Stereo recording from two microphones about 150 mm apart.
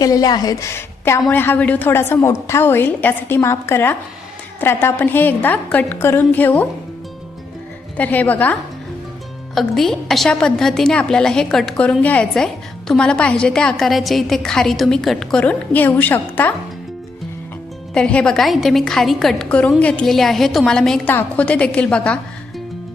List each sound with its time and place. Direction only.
0.0 s a woman's voice: 25° left (ahead or behind)
7.9 s a woman's voice: 10° left (ahead or behind)
9.6 s a woman's voice: centre (ahead or behind)
17.9 s a woman's voice: 5° left (ahead or behind)